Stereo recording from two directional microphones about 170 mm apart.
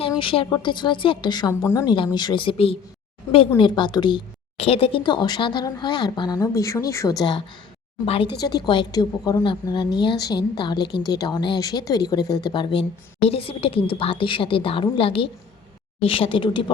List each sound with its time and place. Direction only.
0.2 s a woman's voice: 30° left (ahead or behind)
8.0 s speech: 35° left (ahead or behind)
8.4 s a woman's voice: 25° left (ahead or behind)